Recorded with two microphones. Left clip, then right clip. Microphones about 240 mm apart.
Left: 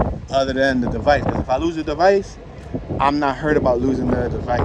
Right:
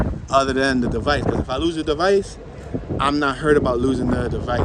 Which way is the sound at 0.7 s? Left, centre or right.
Centre.